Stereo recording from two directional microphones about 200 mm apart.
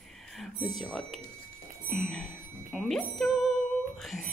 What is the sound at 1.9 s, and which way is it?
Speech, centre (ahead or behind).